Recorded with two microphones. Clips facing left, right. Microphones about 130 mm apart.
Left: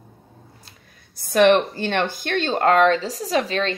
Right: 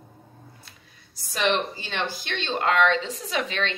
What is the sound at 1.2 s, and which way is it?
Speech, 55° left (ahead or behind).